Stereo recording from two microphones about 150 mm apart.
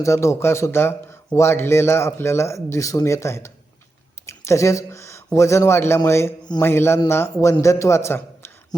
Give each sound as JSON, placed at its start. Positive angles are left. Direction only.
{"t": 0.0, "sound": "a man's voice", "side_deg": 20}